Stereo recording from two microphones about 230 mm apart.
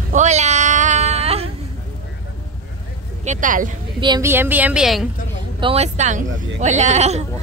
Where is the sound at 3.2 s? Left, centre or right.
Right.